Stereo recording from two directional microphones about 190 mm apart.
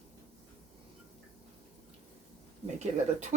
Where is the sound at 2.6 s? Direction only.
35° right (ahead or behind).